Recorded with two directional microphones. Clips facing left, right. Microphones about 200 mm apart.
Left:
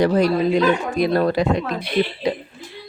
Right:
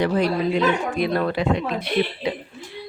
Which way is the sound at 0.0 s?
40° left (ahead or behind).